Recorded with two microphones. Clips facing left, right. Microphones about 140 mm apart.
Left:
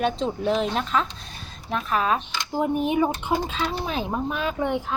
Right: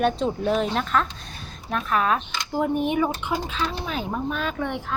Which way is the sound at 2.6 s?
25° left (ahead or behind).